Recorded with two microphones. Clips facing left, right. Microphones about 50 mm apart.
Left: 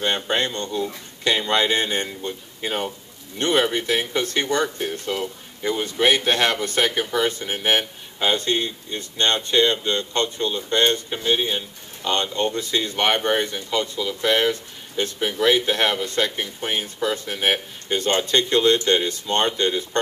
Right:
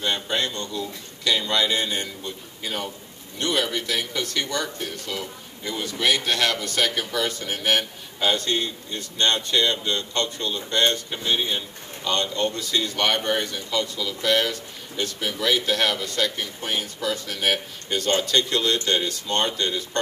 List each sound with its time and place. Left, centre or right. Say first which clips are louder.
0.0 s speech: left 3 dB; left